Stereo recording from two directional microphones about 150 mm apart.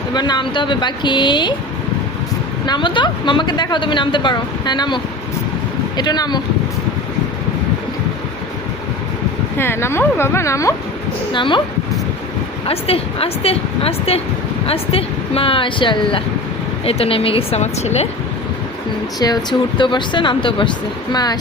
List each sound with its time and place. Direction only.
0.1 s a woman's voice: 30° left (ahead or behind)
2.6 s a woman's voice: 30° left (ahead or behind)
6.0 s speech: 25° left (ahead or behind)
9.6 s a woman's voice: 15° left (ahead or behind)
11.3 s a woman's voice: 35° left (ahead or behind)
12.6 s a woman's voice: 40° left (ahead or behind)
19.2 s a woman's voice: 30° left (ahead or behind)